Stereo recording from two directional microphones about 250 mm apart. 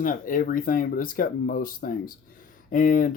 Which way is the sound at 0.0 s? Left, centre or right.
Left.